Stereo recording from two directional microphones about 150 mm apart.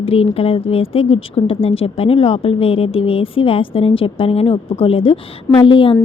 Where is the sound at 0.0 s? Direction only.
40° left (ahead or behind).